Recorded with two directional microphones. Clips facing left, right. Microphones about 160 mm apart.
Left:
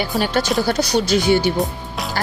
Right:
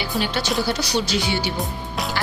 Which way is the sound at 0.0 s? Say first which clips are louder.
Left 5 dB; 45° left (ahead or behind).